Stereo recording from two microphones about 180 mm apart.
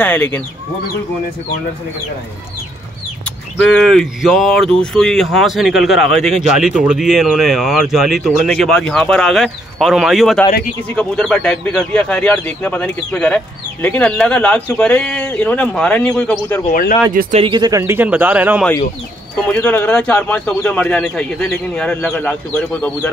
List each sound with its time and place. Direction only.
0.0 s speech: 10° left (ahead or behind)
3.6 s speech: centre (ahead or behind)
16.7 s speech: 50° left (ahead or behind)
17.1 s speech: 50° right (ahead or behind)
17.4 s speech: 25° right (ahead or behind); by 18.7 s 10° right (ahead or behind)
19.4 s speech: 10° left (ahead or behind)